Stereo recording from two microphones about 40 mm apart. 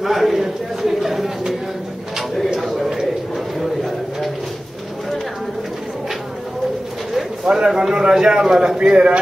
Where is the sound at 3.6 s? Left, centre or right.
Centre.